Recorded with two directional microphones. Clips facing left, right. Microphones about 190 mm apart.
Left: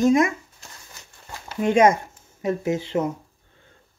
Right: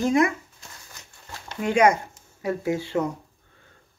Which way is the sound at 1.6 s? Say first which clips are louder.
Left 2 dB; 25° left (ahead or behind).